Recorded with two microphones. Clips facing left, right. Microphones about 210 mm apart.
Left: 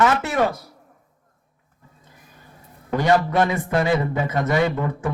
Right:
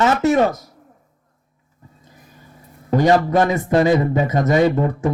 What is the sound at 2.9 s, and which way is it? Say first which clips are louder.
A man's voice: right 4 dB; 40° right (ahead or behind).